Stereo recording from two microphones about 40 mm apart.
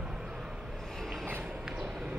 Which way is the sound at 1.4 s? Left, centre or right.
Centre.